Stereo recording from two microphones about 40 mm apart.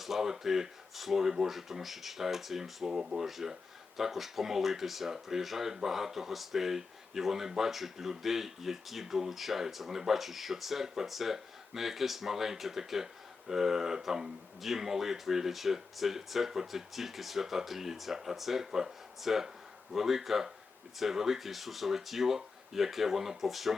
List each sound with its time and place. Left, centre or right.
0.0 s speech: centre
2.8 s speech: centre
3.2 s speech: centre